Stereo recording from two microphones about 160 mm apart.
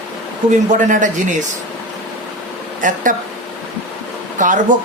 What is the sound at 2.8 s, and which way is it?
Speech, 55° right (ahead or behind).